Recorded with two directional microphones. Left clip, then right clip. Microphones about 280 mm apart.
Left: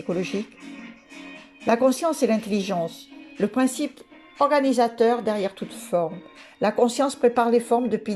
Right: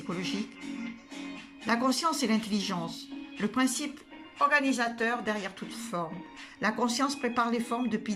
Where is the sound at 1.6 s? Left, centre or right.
Centre.